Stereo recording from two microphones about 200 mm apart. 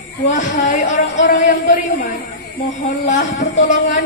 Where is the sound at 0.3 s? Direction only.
40° left (ahead or behind).